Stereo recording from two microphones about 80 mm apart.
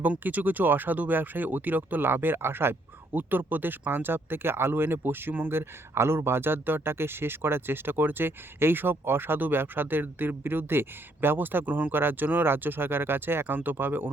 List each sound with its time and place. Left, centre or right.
0.0 s speech: right